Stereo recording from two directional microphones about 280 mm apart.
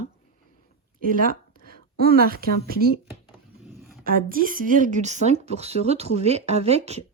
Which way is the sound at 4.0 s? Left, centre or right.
Right.